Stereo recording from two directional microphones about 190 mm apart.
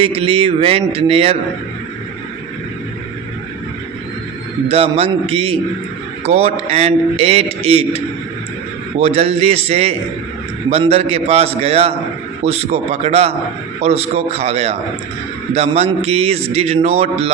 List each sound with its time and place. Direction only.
0.0 s a man's voice: 30° right (ahead or behind)
4.7 s a man's voice: 30° right (ahead or behind)